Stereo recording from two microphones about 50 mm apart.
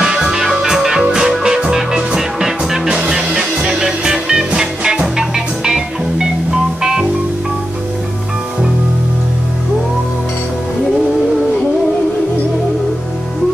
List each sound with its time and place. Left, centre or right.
0.0 s music: centre